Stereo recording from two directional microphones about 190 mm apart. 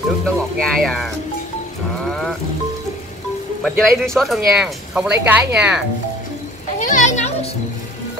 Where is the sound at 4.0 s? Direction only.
Centre (ahead or behind).